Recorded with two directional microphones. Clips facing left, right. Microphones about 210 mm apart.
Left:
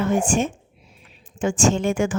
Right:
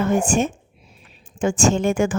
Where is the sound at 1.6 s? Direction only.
45° right (ahead or behind).